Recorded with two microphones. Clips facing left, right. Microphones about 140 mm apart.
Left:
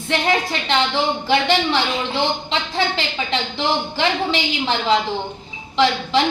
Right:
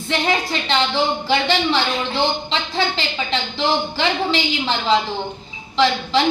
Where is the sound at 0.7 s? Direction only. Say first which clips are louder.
Even; 15° left (ahead or behind).